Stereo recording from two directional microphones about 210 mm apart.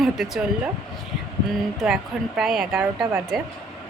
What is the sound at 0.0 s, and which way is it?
Speech, 5° right (ahead or behind).